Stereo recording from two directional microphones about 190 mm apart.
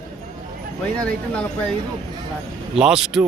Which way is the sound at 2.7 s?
5° right (ahead or behind).